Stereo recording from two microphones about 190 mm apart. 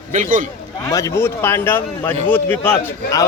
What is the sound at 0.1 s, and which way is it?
Speech, 40° right (ahead or behind).